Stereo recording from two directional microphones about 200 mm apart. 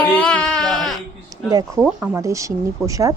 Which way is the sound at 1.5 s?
20° right (ahead or behind).